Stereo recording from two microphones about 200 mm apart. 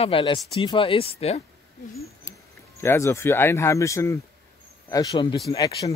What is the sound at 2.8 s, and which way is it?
A man's voice, 15° left (ahead or behind).